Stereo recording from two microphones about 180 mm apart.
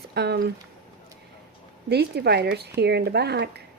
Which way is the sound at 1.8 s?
65° right (ahead or behind).